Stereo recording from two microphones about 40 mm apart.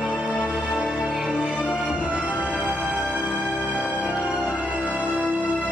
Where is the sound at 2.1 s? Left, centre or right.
Right.